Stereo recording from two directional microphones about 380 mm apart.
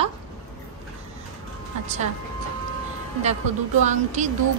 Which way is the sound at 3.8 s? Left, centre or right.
Centre.